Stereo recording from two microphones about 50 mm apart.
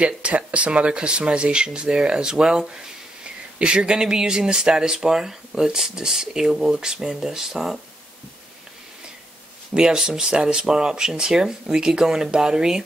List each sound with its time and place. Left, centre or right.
0.0 s speech: right; by 7.8 s centre
9.8 s speech: centre